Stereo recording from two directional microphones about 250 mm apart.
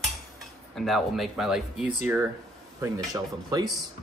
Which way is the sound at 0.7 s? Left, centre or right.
Centre.